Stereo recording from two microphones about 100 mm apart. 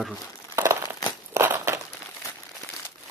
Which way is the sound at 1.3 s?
25° right (ahead or behind).